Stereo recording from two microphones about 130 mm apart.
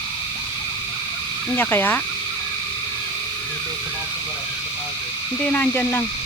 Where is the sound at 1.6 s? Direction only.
15° left (ahead or behind).